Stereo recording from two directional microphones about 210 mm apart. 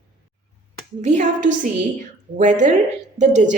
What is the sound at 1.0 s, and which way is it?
Speech, 35° right (ahead or behind).